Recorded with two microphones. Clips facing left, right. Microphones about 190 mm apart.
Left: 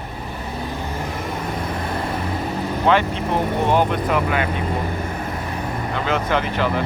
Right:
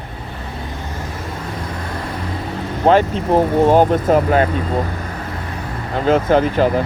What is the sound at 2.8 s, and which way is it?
Speech, 40° right (ahead or behind).